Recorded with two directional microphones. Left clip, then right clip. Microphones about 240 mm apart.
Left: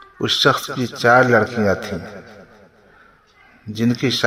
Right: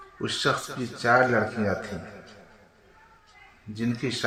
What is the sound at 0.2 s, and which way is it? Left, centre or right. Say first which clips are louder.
A man's voice: left 10 dB; left.